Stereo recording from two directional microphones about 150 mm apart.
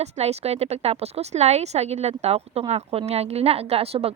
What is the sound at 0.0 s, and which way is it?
A woman's voice, 45° right (ahead or behind).